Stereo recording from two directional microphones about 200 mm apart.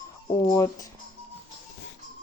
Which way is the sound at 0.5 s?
15° left (ahead or behind).